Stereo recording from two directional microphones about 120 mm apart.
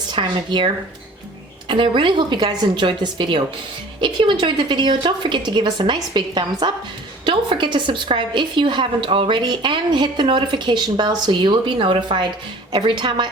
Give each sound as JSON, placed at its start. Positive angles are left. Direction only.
{"t": 0.1, "sound": "a woman's voice", "side_deg": -40}